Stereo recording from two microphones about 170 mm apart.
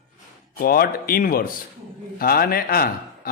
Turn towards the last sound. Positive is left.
turn(degrees=60)  # may be behind; listen again after turning